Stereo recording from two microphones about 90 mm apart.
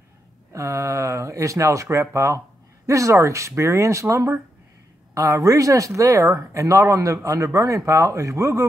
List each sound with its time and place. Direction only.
0.5 s speech: 35° right (ahead or behind)